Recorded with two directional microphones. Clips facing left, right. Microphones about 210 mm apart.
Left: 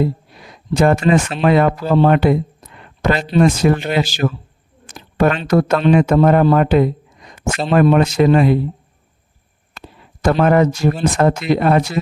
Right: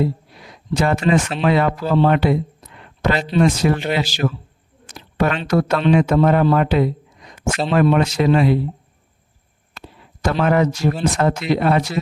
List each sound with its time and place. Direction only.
0.7 s speech: 50° left (ahead or behind)
9.7 s a sound: 50° left (ahead or behind)
11.0 s speech: 50° left (ahead or behind)